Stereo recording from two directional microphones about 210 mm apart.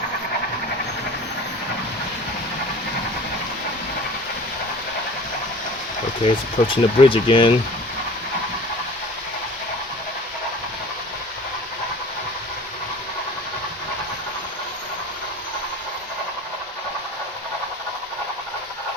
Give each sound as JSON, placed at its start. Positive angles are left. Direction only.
{"t": 6.2, "sound": "speech", "side_deg": 25}